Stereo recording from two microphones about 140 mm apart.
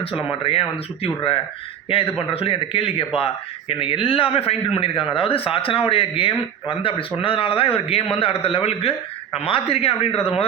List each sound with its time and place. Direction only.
0.0 s a man's voice: 40° left (ahead or behind)